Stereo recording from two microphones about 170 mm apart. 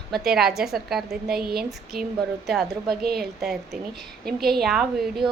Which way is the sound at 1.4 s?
65° right (ahead or behind).